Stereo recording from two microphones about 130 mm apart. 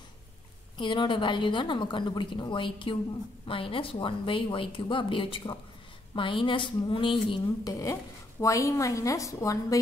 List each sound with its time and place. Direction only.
0.7 s a woman's voice: 40° left (ahead or behind)
7.8 s a woman's voice: 25° left (ahead or behind)